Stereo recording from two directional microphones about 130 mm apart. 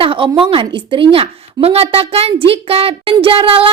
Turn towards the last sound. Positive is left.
turn(degrees=-45)  # may be behind; listen again after turning